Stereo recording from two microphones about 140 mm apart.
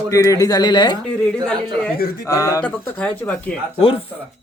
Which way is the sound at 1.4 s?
5° left (ahead or behind).